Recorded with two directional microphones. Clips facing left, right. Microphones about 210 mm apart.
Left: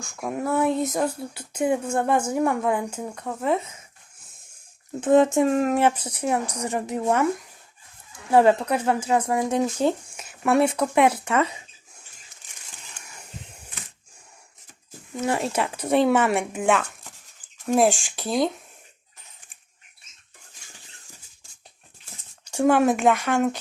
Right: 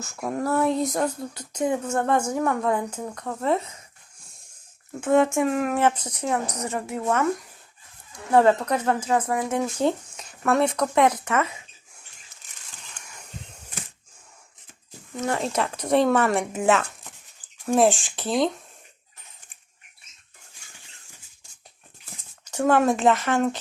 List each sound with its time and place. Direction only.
0.0 s speech: centre (ahead or behind)
4.9 s speech: 20° left (ahead or behind)
5.4 s speech: 35° left (ahead or behind)
5.7 s speech: 10° left (ahead or behind)
8.4 s speech: 15° left (ahead or behind)
9.3 s speech: 20° left (ahead or behind)
12.8 s a sound: 10° left (ahead or behind)
15.4 s speech: 10° left (ahead or behind)
22.4 s speech: 10° left (ahead or behind)
23.0 s speech: centre (ahead or behind)